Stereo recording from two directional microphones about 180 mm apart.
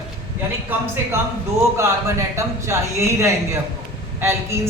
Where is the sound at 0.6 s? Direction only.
15° right (ahead or behind).